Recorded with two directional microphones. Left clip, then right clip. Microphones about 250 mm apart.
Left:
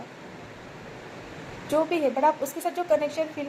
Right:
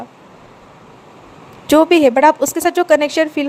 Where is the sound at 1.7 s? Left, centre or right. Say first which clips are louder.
Right 14 dB; right.